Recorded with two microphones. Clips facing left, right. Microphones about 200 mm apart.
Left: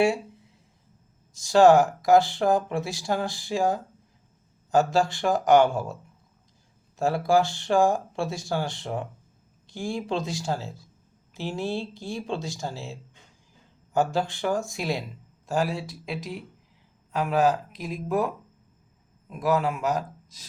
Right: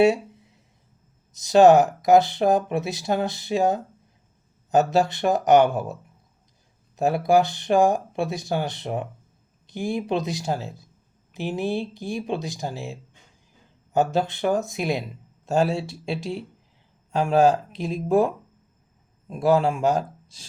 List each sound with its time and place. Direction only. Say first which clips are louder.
1.3 s speech: right 3 dB; 20° right (ahead or behind)